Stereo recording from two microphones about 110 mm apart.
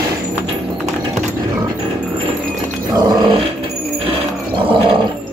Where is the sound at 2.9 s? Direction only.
40° right (ahead or behind).